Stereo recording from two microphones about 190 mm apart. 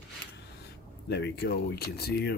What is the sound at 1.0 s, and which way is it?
Speech, 60° left (ahead or behind).